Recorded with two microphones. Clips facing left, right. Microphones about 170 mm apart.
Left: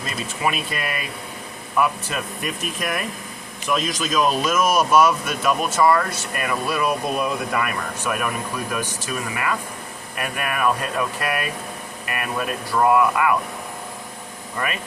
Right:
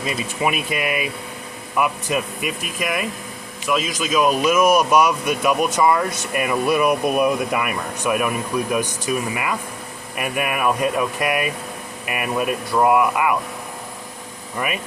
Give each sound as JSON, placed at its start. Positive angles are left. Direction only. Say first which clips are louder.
{"t": 0.0, "sound": "speech", "louder": "right 3 dB", "side_deg": -10}